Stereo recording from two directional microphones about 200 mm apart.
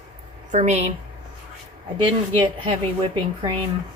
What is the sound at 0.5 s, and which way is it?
Speech, 35° right (ahead or behind).